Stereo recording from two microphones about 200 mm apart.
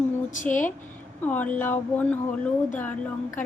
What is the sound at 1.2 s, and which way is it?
A woman's voice, 10° left (ahead or behind).